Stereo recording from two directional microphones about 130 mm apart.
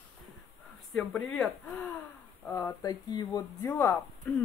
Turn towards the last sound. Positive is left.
turn(degrees=20)  # may be behind; listen again after turning